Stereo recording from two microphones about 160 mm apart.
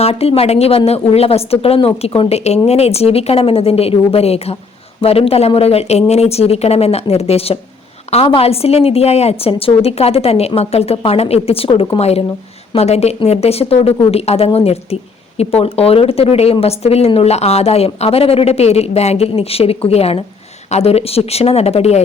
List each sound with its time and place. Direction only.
0.0 s a woman's voice: 40° left (ahead or behind)